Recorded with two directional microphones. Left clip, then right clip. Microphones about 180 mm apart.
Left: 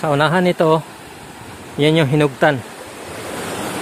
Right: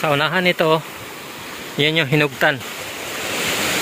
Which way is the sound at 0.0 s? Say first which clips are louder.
Left 1 dB; 20° left (ahead or behind).